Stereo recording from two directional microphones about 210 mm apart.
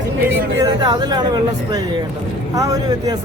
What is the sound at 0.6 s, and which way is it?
Speech, 20° right (ahead or behind).